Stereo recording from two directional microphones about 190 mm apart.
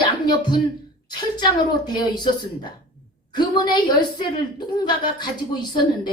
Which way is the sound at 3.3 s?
25° left (ahead or behind).